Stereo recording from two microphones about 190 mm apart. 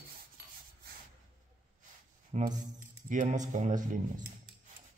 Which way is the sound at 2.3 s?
40° right (ahead or behind).